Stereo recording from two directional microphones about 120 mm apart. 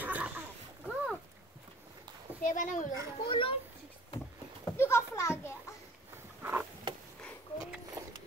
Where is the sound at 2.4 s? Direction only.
90° left.